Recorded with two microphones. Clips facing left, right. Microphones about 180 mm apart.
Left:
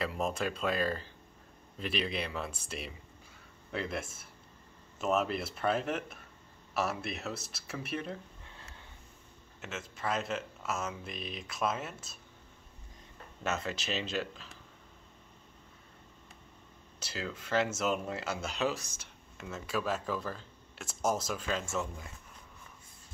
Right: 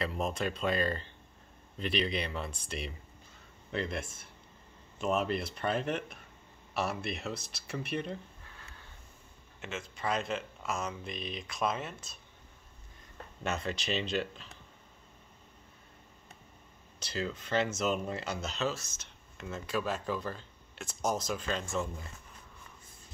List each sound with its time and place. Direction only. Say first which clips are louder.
0.0 s speech: even; 5° left (ahead or behind)
8.5 s a sound: left 1 dB; 25° left (ahead or behind)
9.6 s speech: right 1 dB; 5° left (ahead or behind)
13.4 s speech: even; 5° left (ahead or behind)
17.0 s speech: right 3 dB; 5° left (ahead or behind)